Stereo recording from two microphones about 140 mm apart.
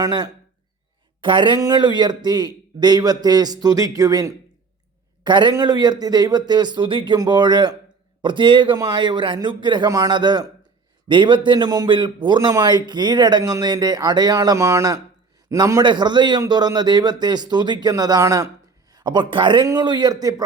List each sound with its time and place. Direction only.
0.0 s a man's voice: 30° right (ahead or behind)